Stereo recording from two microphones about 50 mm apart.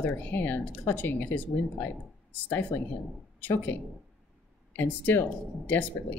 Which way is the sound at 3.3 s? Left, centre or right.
Left.